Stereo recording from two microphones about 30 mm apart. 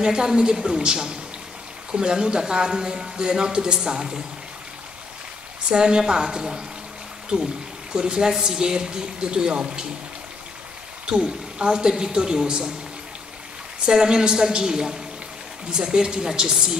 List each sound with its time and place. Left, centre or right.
0.0 s a man's voice: right
5.7 s a man's voice: right
7.3 s a man's voice: right
11.1 s a man's voice: right
13.8 s a man's voice: right